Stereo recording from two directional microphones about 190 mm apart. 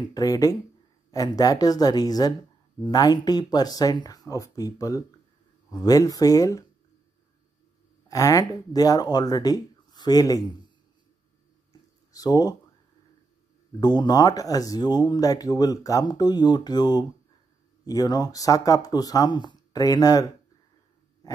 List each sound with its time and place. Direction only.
0.0 s speech: 20° left (ahead or behind)
8.1 s speech: 15° left (ahead or behind)
12.1 s speech: 20° left (ahead or behind)
13.7 s speech: 20° left (ahead or behind)